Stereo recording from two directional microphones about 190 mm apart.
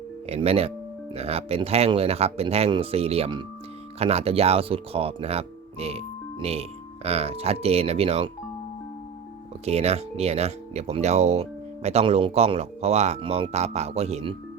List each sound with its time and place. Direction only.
0.3 s speech: 35° right (ahead or behind)
9.6 s speech: 35° right (ahead or behind)